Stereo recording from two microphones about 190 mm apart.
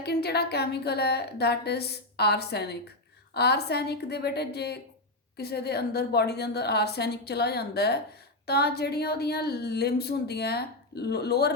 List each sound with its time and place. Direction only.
0.0 s a woman's voice: 60° left (ahead or behind)